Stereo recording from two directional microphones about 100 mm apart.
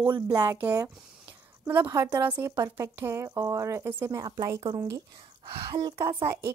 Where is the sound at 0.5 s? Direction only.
15° right (ahead or behind).